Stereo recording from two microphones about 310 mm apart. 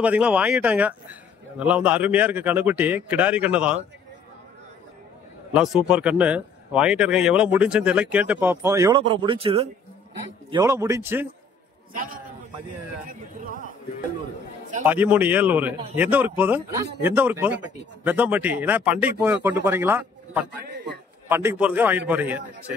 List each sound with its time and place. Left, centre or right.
0.0 s speech: centre
5.5 s speech: centre
11.9 s a man's voice: right
14.8 s speech: centre